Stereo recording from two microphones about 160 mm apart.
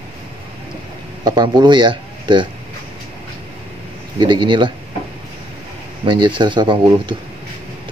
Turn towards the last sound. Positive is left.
turn(degrees=-30)  # may be behind; listen again after turning